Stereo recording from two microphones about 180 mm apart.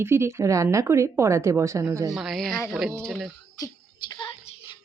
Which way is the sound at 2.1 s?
Centre (ahead or behind).